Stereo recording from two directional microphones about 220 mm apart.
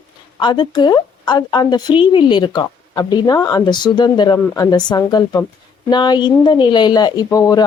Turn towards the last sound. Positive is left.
turn(degrees=15)  # may be behind; listen again after turning